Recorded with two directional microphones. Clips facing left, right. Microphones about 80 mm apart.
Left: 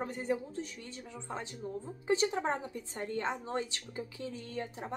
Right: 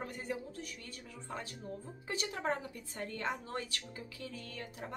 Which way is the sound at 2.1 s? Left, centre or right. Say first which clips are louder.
Left 6 dB; left.